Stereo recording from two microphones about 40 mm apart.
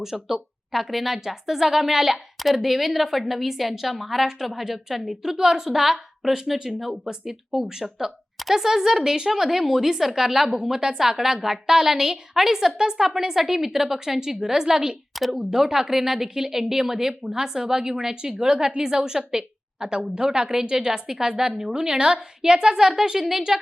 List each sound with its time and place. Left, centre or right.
0.0 s a woman's voice: centre
15.1 s a sound: centre
15.4 s a woman's voice: centre